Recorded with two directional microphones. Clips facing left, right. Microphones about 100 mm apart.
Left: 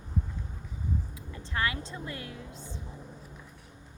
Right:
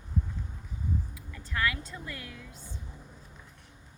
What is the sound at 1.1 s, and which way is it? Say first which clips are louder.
Speech: left 1 dB; 25° left (ahead or behind).